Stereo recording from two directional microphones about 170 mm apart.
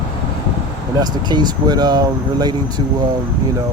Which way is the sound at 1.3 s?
25° right (ahead or behind).